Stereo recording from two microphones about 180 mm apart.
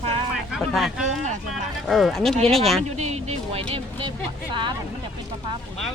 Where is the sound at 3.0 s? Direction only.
40° right (ahead or behind).